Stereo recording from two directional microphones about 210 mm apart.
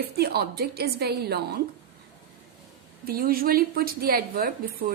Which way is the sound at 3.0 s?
45° right (ahead or behind).